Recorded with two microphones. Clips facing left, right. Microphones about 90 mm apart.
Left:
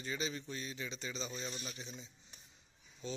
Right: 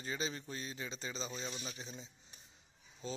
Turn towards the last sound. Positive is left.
turn(degrees=-35)  # may be behind; listen again after turning